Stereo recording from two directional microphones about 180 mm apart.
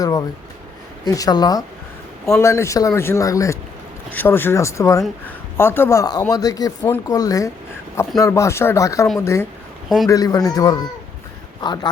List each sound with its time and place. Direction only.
0.0 s a man's voice: 20° left (ahead or behind)